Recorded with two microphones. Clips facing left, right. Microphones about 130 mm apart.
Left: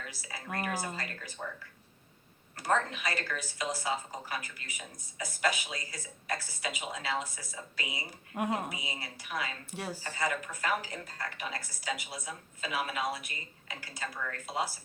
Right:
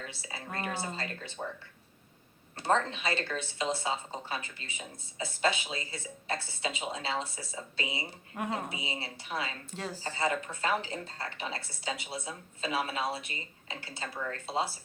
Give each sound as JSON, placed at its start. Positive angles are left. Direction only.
{"t": 0.1, "sound": "speech", "side_deg": -25}
{"t": 2.6, "sound": "speech", "side_deg": -25}
{"t": 9.7, "sound": "speech", "side_deg": 10}
{"t": 10.2, "sound": "speech", "side_deg": -30}